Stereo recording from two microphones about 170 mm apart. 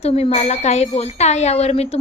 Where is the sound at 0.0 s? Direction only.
40° left (ahead or behind).